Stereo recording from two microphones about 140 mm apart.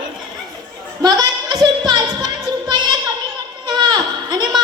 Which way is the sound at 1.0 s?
30° right (ahead or behind).